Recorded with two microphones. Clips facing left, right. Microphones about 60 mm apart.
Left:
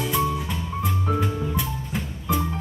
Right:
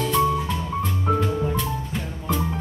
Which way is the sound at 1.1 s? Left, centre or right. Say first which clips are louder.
Right 4 dB; centre.